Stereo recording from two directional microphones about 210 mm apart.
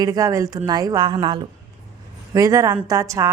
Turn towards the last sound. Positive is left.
turn(degrees=-15)  # may be behind; listen again after turning